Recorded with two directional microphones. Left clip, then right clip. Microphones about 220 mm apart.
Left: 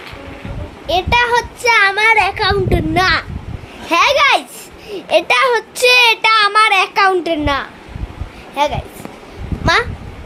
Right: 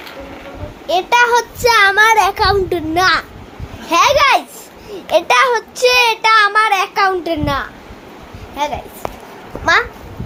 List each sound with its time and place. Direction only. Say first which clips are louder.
0.9 s a child's voice: right 1 dB; centre (ahead or behind)
2.6 s a child's voice: even; 10° left (ahead or behind)